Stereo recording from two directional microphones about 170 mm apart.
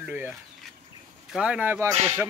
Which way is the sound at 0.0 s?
10° right (ahead or behind).